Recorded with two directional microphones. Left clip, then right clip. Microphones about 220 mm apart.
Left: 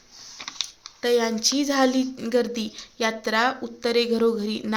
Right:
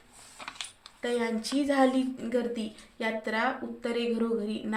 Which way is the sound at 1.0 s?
40° left (ahead or behind).